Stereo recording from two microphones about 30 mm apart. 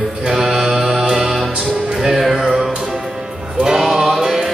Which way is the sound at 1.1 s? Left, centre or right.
Centre.